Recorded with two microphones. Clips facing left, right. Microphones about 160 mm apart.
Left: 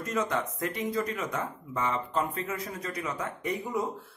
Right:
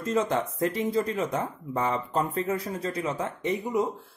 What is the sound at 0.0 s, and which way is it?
Speech, 30° right (ahead or behind).